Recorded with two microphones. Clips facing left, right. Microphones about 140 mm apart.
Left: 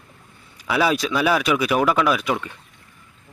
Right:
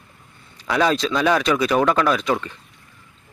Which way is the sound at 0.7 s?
10° left (ahead or behind).